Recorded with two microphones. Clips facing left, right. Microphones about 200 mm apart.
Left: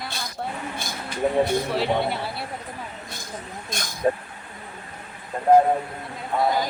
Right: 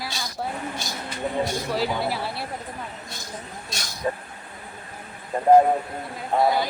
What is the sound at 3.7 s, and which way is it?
Speech, 50° left (ahead or behind).